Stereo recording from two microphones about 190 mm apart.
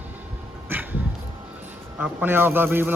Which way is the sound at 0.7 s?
10° right (ahead or behind).